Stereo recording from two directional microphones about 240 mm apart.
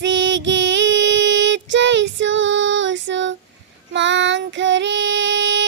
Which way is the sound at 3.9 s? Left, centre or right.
Right.